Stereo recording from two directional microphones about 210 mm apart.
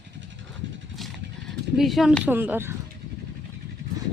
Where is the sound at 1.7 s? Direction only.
Centre (ahead or behind).